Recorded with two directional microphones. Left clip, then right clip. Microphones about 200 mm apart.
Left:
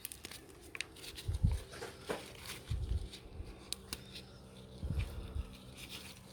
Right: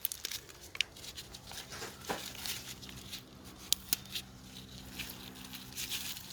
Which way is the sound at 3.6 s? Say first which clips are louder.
Right 10 dB; centre (ahead or behind).